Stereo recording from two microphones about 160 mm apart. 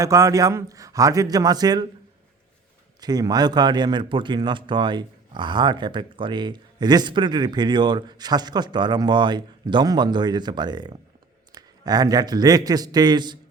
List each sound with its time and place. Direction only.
0.0 s a man's voice: 20° right (ahead or behind)
3.0 s a man's voice: 25° right (ahead or behind)